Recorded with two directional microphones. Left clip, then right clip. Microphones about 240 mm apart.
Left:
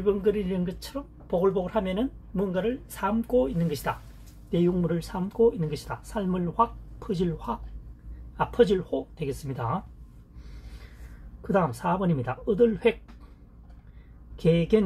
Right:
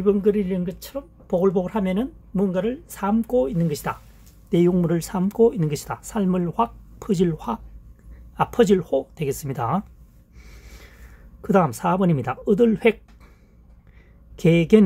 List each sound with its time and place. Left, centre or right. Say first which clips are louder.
0.0 s speech: right 5 dB; right
11.4 s speech: right 6 dB; right
14.3 s speech: right 6 dB; right